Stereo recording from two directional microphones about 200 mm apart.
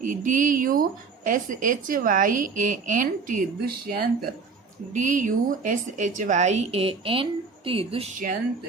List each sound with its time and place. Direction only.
0.0 s a woman's voice: 40° right (ahead or behind)
4.9 s a woman's voice: 40° right (ahead or behind)